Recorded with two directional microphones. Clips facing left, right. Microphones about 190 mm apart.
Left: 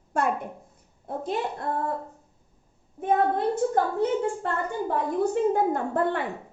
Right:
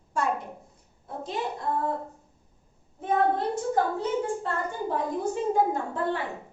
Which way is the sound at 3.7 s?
60° left (ahead or behind).